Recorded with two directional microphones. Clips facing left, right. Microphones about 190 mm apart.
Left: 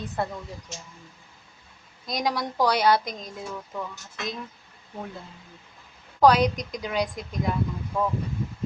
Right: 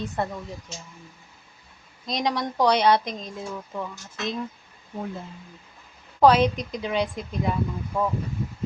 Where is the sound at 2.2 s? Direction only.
Centre (ahead or behind).